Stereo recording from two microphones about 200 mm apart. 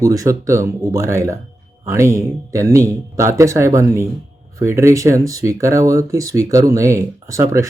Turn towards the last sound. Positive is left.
turn(degrees=-15)  # may be behind; listen again after turning